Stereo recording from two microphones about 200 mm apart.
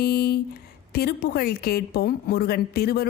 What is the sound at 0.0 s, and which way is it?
A woman's voice, 50° left (ahead or behind).